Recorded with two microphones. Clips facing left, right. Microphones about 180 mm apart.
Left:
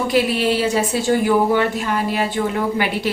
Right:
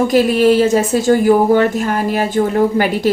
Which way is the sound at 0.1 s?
45° right (ahead or behind).